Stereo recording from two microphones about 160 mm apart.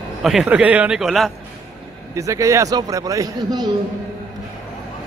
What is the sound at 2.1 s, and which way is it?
A man's voice, 20° right (ahead or behind).